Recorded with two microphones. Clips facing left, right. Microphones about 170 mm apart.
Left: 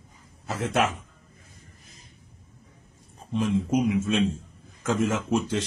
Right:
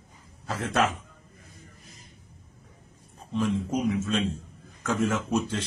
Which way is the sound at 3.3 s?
20° left (ahead or behind).